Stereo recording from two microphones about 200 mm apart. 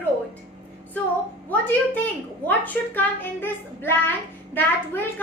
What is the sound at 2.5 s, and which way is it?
A woman's voice, 10° left (ahead or behind).